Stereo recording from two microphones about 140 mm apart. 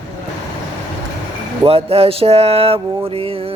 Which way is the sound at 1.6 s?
45° right (ahead or behind).